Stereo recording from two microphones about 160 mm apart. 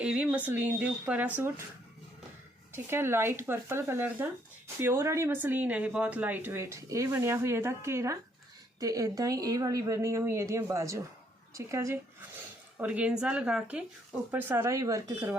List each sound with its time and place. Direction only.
0.0 s speech: 10° right (ahead or behind)
2.7 s a woman's voice: 15° right (ahead or behind)